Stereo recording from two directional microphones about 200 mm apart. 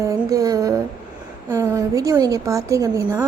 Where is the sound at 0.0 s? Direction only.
15° right (ahead or behind).